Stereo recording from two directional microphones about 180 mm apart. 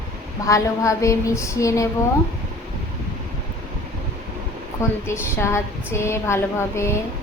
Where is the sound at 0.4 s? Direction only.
20° left (ahead or behind).